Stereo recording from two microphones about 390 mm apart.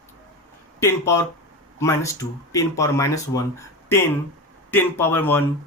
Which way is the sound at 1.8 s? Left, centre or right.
Centre.